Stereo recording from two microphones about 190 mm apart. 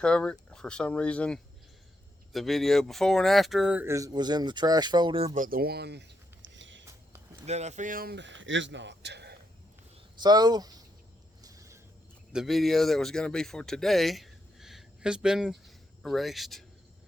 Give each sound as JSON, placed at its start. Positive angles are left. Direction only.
{"t": 0.0, "sound": "speech", "side_deg": 5}
{"t": 5.3, "sound": "a sound", "side_deg": -45}
{"t": 7.4, "sound": "speech", "side_deg": -35}
{"t": 10.2, "sound": "speech", "side_deg": -20}
{"t": 11.4, "sound": "a sound", "side_deg": -15}
{"t": 12.3, "sound": "speech", "side_deg": 0}